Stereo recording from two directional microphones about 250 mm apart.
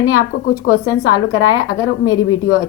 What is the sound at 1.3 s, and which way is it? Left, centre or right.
A woman's voice, left.